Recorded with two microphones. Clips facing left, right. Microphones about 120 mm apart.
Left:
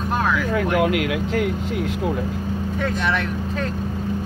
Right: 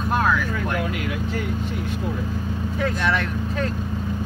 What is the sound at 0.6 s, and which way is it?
Speech, 80° left.